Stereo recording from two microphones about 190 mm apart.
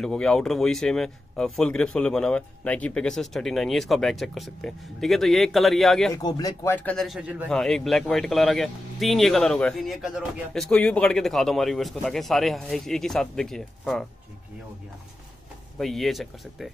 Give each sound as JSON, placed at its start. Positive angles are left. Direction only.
{"t": 0.0, "sound": "a man's voice", "side_deg": 5}
{"t": 6.1, "sound": "a man's voice", "side_deg": 20}
{"t": 15.8, "sound": "a man's voice", "side_deg": 0}